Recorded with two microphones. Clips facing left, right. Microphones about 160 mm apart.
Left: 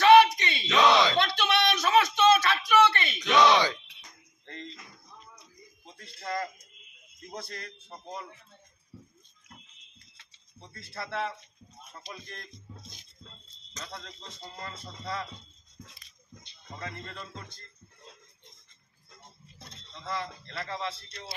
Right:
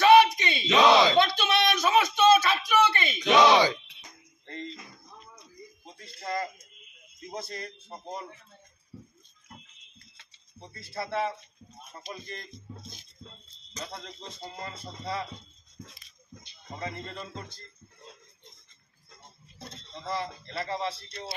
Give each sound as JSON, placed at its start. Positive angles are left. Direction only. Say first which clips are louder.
{"t": 0.0, "sound": "a sound", "louder": "even", "side_deg": -5}
{"t": 3.3, "sound": "music", "louder": "right 2 dB", "side_deg": -10}
{"t": 5.9, "sound": "a sound", "louder": "right 1 dB", "side_deg": -5}
{"t": 7.2, "sound": "speech", "louder": "right 3 dB", "side_deg": -5}
{"t": 10.7, "sound": "speech", "louder": "right 4 dB", "side_deg": -5}
{"t": 13.8, "sound": "a man's voice", "louder": "right 2 dB", "side_deg": -20}
{"t": 16.4, "sound": "speech", "louder": "right 4 dB", "side_deg": -15}
{"t": 20.1, "sound": "a man's voice", "louder": "right 2 dB", "side_deg": -10}
{"t": 21.1, "sound": "speech", "louder": "right 4 dB", "side_deg": -30}